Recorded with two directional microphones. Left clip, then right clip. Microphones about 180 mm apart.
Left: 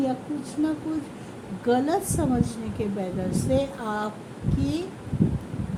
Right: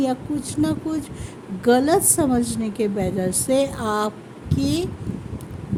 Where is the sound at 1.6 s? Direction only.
55° right (ahead or behind).